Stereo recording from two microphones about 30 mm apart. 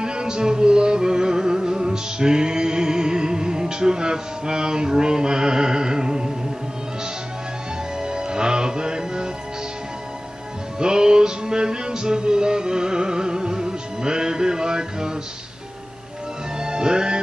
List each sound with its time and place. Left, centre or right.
0.0 s music: right
8.0 s music: right
10.8 s music: right
16.5 s music: right